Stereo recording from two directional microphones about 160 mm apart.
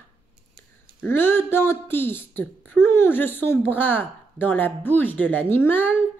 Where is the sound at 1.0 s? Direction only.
15° left (ahead or behind).